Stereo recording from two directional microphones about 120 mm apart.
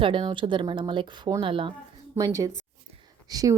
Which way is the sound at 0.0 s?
45° right (ahead or behind).